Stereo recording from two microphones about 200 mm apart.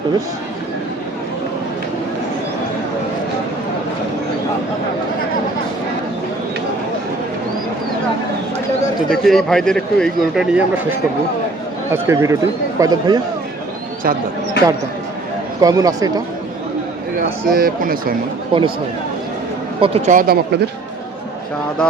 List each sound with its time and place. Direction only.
9.0 s speech: centre (ahead or behind)
11.9 s a man's voice: 15° right (ahead or behind)
15.6 s speech: 20° right (ahead or behind)
17.2 s speech: 45° right (ahead or behind)
18.5 s speech: 25° right (ahead or behind)
19.8 s speech: 30° right (ahead or behind)
20.1 s speech: 50° right (ahead or behind)